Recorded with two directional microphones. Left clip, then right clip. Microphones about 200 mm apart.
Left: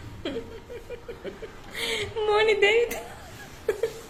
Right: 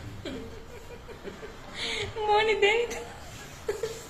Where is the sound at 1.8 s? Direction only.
35° left (ahead or behind).